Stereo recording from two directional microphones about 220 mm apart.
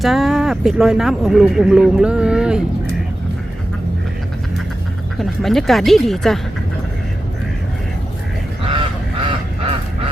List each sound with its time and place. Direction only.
0.0 s speech: centre (ahead or behind)
5.1 s speech: centre (ahead or behind)
8.6 s goose: 25° right (ahead or behind)